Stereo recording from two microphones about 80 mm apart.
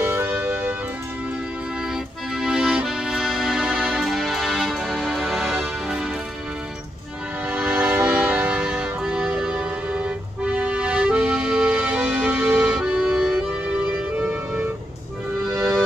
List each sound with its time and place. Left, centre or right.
0.0 s music: right
2.3 s accordion: centre
5.9 s music: centre
7.4 s music: centre
12.7 s music: centre
15.4 s music: right